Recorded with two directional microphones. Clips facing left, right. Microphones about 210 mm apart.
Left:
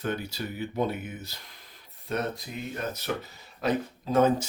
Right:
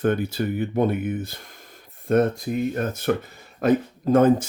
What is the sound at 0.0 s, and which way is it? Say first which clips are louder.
Speech: right 10 dB; 50° right (ahead or behind).